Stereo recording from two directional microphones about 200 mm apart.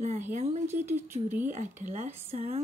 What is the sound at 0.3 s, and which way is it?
Speech, 35° right (ahead or behind).